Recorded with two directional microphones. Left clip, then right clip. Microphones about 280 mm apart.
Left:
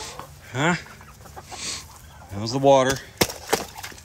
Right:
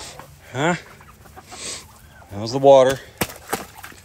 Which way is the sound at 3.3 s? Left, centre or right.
Left.